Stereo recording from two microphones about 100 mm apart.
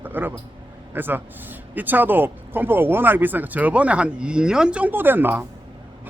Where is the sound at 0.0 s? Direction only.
20° right (ahead or behind).